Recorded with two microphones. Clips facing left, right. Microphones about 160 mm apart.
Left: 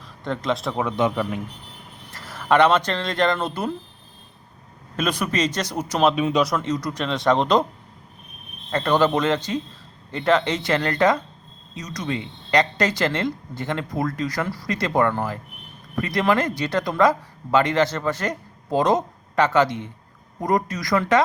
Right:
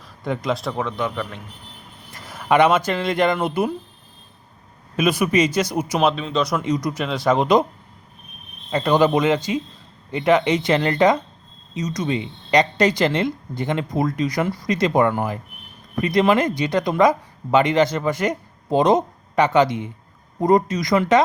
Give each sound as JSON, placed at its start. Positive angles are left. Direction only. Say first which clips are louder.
{"t": 0.3, "sound": "speech", "louder": "right 1 dB", "side_deg": 0}
{"t": 0.9, "sound": "a man's voice", "louder": "left 3 dB", "side_deg": 15}
{"t": 2.1, "sound": "speech", "louder": "right 1 dB", "side_deg": -15}
{"t": 4.9, "sound": "speech", "louder": "right 5 dB", "side_deg": -10}
{"t": 6.1, "sound": "a man's voice", "louder": "left 3 dB", "side_deg": 15}
{"t": 6.6, "sound": "speech", "louder": "right 3 dB", "side_deg": -15}
{"t": 7.0, "sound": "speech", "louder": "left 1 dB", "side_deg": -5}
{"t": 8.7, "sound": "speech", "louder": "right 2 dB", "side_deg": -10}
{"t": 20.4, "sound": "speech", "louder": "right 5 dB", "side_deg": -25}